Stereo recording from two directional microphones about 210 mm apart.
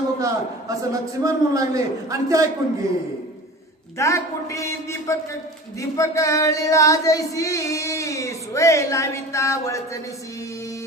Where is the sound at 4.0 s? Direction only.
15° left (ahead or behind).